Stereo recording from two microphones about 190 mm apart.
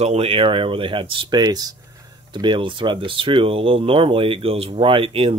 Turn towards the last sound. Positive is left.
turn(degrees=-30)  # may be behind; listen again after turning